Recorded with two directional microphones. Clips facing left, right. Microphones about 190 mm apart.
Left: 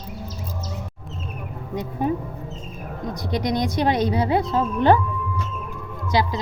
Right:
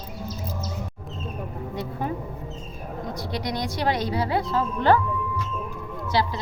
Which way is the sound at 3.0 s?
20° left (ahead or behind).